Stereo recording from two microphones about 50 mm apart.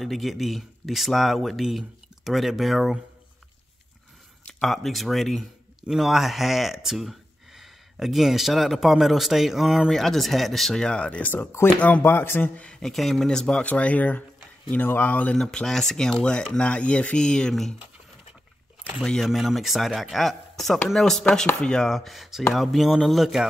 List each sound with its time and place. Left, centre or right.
0.0 s speech: centre
4.6 s speech: centre
10.8 s speech: centre
11.3 s speech: left
12.8 s speech: centre
13.3 s speech: centre
13.6 s speech: left
15.3 s speech: centre; by 17.2 s left
17.2 s speech: centre
19.2 s speech: centre